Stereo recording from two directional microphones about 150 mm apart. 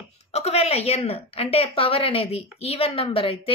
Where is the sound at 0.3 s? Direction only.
45° left (ahead or behind).